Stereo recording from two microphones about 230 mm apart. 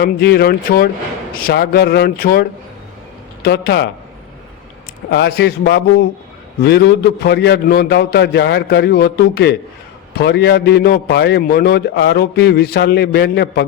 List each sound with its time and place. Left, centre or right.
0.0 s a man's voice: left
5.1 s a man's voice: left